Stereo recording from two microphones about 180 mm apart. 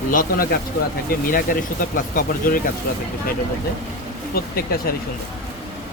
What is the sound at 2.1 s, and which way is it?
Speech, 50° left (ahead or behind).